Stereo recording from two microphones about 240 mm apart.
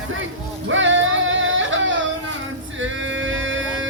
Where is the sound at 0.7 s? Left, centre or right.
Right.